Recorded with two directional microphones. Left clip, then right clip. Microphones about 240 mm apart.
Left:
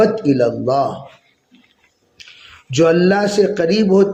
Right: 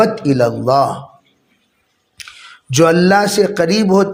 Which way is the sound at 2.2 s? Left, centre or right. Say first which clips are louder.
Right 5 dB; right.